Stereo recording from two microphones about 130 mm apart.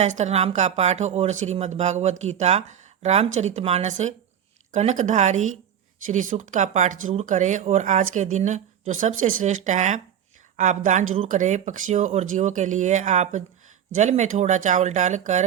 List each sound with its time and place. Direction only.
0.0 s speech: 65° right (ahead or behind)